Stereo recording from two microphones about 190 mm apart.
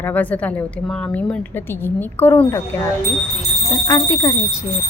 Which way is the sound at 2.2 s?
10° left (ahead or behind).